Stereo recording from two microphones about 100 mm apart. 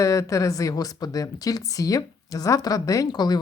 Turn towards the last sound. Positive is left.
turn(degrees=45)  # may be behind; listen again after turning